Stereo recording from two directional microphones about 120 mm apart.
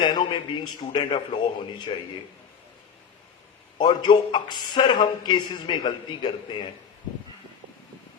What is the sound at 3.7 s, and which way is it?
A man's voice, 40° left (ahead or behind).